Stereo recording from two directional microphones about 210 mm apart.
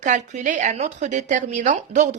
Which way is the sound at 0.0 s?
35° right (ahead or behind).